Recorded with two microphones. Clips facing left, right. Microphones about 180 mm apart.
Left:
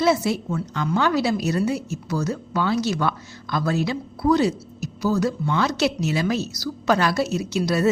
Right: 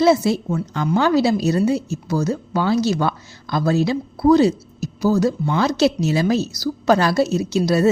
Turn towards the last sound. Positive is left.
turn(degrees=-30)  # may be behind; listen again after turning